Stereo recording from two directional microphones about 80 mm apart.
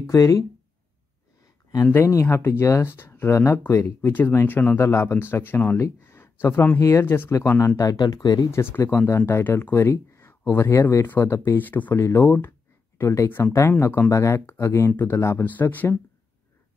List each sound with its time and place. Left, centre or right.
0.0 s speech: left
2.0 s speech: left
3.3 s speech: left
4.7 s speech: left
5.8 s a sound: left
6.4 s speech: left
6.8 s speech: left
8.0 s speech: left
8.5 s speech: left
11.5 s speech: left
12.0 s speech: left
12.9 s speech: left
14.9 s speech: left
15.4 s speech: left